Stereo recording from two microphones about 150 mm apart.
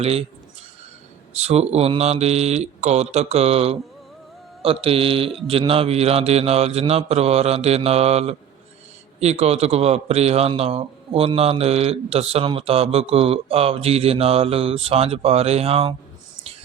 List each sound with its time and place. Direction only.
0.0 s speech: 40° right (ahead or behind)
1.4 s mantra: 45° right (ahead or behind)
10.6 s speech: 40° right (ahead or behind)